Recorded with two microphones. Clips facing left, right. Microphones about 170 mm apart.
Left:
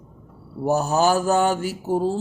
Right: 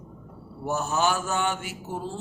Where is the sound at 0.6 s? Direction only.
35° left (ahead or behind).